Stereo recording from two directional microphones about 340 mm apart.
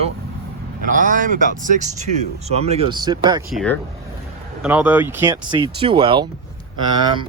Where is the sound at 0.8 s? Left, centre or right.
Right.